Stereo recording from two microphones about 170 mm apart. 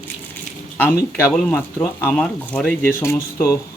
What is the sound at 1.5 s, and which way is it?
Speech, 10° left (ahead or behind).